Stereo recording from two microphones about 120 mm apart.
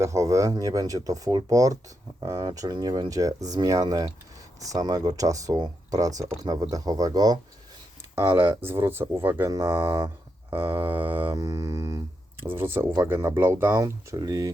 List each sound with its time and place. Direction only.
0.0 s speech: 25° right (ahead or behind)
8.1 s speech: 20° right (ahead or behind)
10.5 s mantra: 15° right (ahead or behind)
11.3 s speech: 30° right (ahead or behind)
12.4 s mantra: 20° right (ahead or behind)
13.0 s speech: 20° right (ahead or behind)